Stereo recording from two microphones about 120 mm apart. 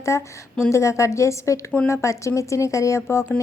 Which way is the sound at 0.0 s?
25° left (ahead or behind).